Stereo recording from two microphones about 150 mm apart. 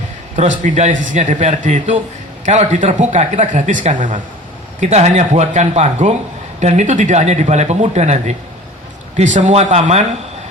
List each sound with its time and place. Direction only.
0.3 s a man's voice: 55° right (ahead or behind)
4.8 s speech: 45° right (ahead or behind)